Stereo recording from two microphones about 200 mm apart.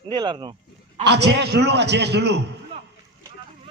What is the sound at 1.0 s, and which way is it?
A man's voice, 55° right (ahead or behind).